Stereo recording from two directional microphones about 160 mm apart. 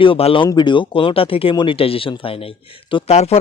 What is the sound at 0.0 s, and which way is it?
Speech, 35° left (ahead or behind).